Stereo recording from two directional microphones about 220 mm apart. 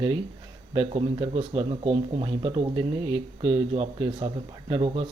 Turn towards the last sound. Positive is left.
turn(degrees=-25)  # may be behind; listen again after turning